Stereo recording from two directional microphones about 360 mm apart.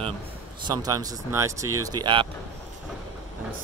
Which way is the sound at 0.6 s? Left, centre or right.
Centre.